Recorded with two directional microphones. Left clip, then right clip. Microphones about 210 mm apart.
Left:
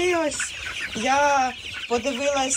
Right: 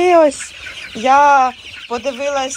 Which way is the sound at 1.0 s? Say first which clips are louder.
Right 10 dB; centre (ahead or behind).